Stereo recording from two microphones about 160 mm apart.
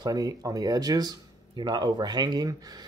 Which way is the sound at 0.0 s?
25° right (ahead or behind).